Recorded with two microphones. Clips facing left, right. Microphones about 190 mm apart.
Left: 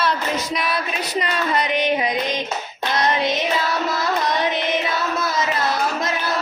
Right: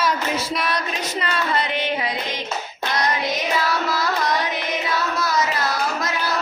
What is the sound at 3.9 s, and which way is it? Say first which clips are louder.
Carnatic music: left 1 dB; 20° left (ahead or behind).